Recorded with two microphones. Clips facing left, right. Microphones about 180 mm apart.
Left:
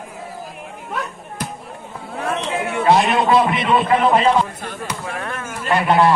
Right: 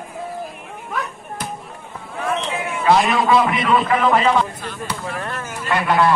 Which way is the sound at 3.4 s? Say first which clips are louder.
Left 1 dB; 25° left (ahead or behind).